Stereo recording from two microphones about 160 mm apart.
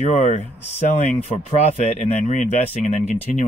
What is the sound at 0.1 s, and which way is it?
Speech, 45° left (ahead or behind).